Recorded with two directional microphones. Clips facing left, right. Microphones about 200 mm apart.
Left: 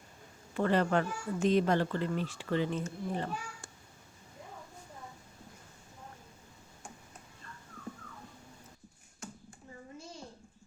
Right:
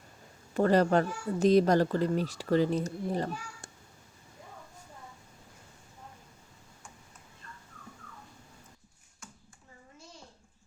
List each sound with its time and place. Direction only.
0.5 s a child's voice: 40° right (ahead or behind)